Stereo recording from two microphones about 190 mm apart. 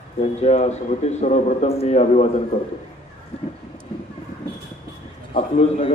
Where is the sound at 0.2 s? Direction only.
35° left (ahead or behind).